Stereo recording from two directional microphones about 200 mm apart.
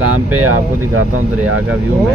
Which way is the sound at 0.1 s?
90° right.